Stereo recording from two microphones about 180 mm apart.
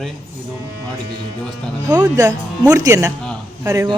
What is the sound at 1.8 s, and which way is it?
A woman's voice, 20° right (ahead or behind).